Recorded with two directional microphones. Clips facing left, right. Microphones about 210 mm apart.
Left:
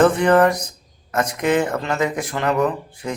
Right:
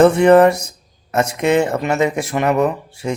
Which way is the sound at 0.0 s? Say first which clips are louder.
Right 5 dB; 25° right (ahead or behind).